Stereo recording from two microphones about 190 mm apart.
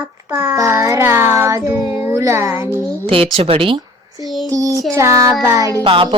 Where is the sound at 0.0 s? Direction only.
10° right (ahead or behind).